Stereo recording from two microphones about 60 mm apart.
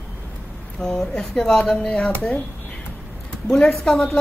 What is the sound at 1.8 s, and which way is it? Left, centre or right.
Speech, centre.